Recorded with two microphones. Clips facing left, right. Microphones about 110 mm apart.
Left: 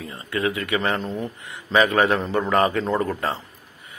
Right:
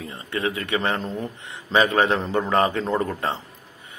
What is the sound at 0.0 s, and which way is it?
A man's voice, 30° right (ahead or behind).